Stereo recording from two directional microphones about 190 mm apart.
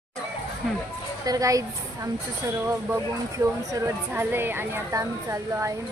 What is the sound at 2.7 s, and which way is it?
Speech, 15° right (ahead or behind).